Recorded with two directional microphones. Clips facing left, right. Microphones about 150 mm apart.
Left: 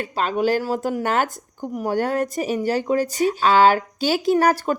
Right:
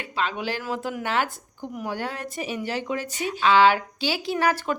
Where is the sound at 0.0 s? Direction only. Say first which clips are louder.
Left 7 dB; 45° left (ahead or behind).